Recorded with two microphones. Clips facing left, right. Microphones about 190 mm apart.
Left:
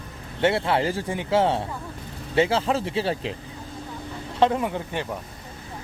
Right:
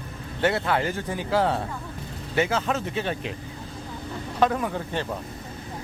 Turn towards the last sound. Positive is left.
turn(degrees=15)  # may be behind; listen again after turning